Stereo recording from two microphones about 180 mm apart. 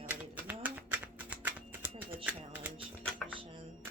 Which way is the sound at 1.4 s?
10° right (ahead or behind).